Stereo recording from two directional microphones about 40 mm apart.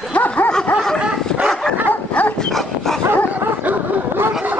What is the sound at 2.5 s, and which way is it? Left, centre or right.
Dog, centre.